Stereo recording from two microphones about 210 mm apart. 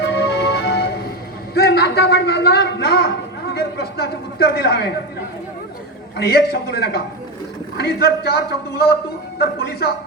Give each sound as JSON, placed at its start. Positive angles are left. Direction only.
{"t": 0.0, "sound": "music", "side_deg": 55}
{"t": 1.5, "sound": "a sound", "side_deg": 50}
{"t": 3.5, "sound": "a man's voice", "side_deg": 50}
{"t": 6.1, "sound": "a man's voice", "side_deg": 50}